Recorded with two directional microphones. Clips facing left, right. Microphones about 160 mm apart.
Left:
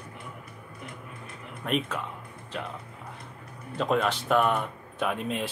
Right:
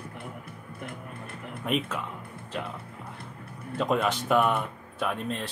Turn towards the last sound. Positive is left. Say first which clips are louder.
# left 1 dB
turn(degrees=5)  # may be behind; listen again after turning